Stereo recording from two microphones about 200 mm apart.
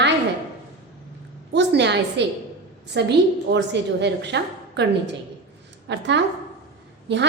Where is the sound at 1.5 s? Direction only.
60° right (ahead or behind).